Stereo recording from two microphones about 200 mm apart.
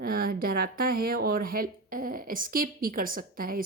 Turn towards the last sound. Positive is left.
turn(degrees=-45)  # may be behind; listen again after turning